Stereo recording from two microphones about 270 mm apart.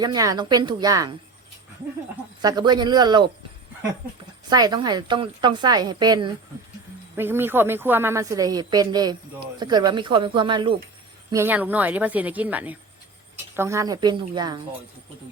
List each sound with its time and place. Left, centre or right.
0.0 s a woman's voice: centre
2.4 s a woman's voice: centre
4.4 s a woman's voice: centre